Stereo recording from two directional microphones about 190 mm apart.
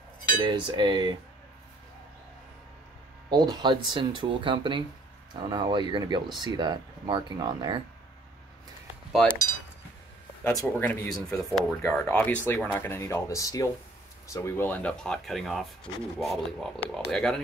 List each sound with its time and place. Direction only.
0.4 s speech: 25° right (ahead or behind)
3.3 s speech: 20° right (ahead or behind)
10.4 s speech: 10° left (ahead or behind)